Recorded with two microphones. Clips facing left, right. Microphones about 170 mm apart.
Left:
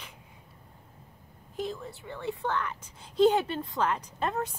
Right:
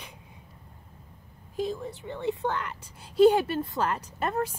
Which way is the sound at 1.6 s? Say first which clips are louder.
Right 4 dB; 15° right (ahead or behind).